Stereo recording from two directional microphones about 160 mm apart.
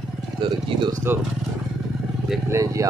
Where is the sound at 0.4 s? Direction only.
30° right (ahead or behind).